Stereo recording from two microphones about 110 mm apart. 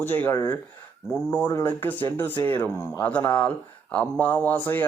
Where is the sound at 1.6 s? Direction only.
15° left (ahead or behind).